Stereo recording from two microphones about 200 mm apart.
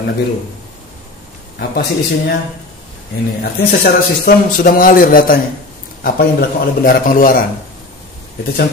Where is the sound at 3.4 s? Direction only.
50° left (ahead or behind).